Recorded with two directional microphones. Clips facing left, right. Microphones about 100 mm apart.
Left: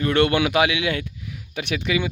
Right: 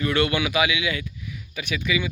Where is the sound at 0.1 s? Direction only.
55° left (ahead or behind).